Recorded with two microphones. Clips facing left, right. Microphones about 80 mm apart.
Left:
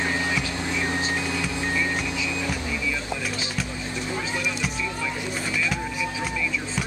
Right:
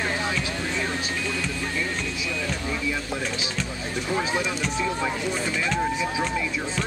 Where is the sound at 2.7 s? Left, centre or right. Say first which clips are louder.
Right 1 dB; right.